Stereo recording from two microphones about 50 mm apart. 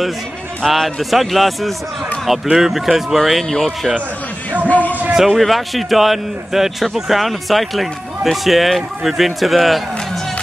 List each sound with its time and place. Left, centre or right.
0.7 s speech: centre
2.4 s speech: centre
4.6 s a sound: left
5.1 s speech: centre